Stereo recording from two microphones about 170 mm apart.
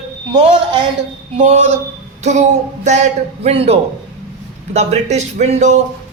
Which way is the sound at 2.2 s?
45° right (ahead or behind).